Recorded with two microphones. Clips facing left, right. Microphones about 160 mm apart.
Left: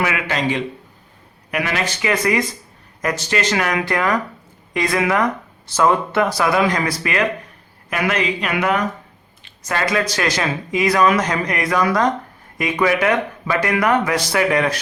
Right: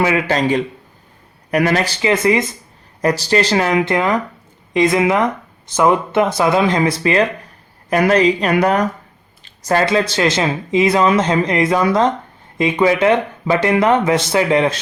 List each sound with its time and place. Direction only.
0.0 s a man's voice: 35° right (ahead or behind)
2.0 s speech: 25° right (ahead or behind)